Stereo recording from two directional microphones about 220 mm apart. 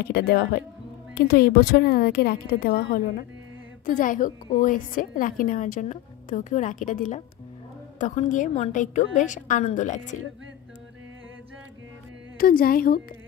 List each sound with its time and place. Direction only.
0.0 s a woman's voice: 45° left (ahead or behind)
12.4 s a woman's voice: 40° left (ahead or behind)